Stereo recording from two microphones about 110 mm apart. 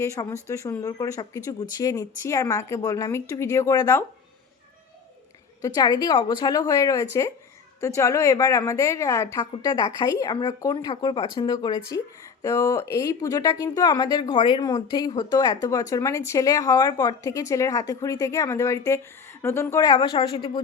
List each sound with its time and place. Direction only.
0.0 s speech: 30° left (ahead or behind)
5.6 s speech: 35° left (ahead or behind)
9.4 s speech: 35° left (ahead or behind)
19.8 s speech: 45° left (ahead or behind)